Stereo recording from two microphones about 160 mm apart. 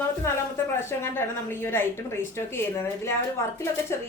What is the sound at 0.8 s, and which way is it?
A woman's voice, 15° left (ahead or behind).